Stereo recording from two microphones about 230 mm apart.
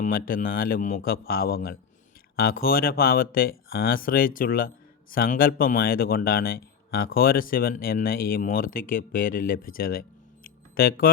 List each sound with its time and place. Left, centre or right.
0.0 s speech: left